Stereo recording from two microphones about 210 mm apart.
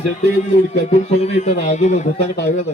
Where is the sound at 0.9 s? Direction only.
30° left (ahead or behind).